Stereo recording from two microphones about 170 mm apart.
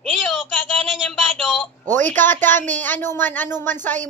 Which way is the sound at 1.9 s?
45° right (ahead or behind).